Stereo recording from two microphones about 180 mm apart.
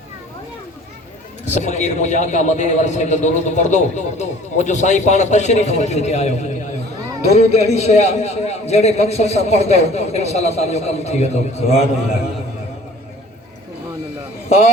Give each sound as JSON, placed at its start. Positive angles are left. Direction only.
{"t": 1.5, "sound": "a man's voice", "side_deg": 40}